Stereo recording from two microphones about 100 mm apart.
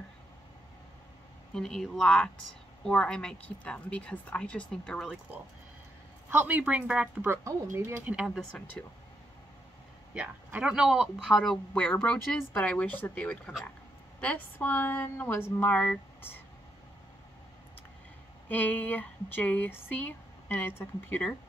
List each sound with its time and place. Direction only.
1.5 s speech: 5° left (ahead or behind)
6.3 s speech: 15° right (ahead or behind)
7.2 s speech: 25° right (ahead or behind)
8.4 s speech: 5° left (ahead or behind)
10.1 s speech: 15° right (ahead or behind); by 16.3 s 15° left (ahead or behind)
18.5 s speech: 15° left (ahead or behind)